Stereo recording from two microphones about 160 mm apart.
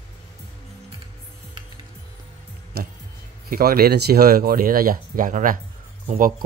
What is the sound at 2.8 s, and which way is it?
Speech, 75° right (ahead or behind).